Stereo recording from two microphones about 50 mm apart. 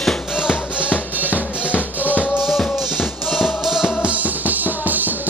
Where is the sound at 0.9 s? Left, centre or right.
Right.